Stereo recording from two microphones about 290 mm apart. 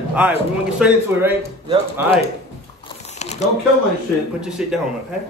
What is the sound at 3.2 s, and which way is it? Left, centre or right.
Shuffling cards, left.